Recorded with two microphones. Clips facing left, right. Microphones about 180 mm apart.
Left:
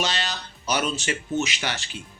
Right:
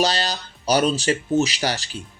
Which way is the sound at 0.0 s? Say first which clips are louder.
Right 6 dB; 35° right (ahead or behind).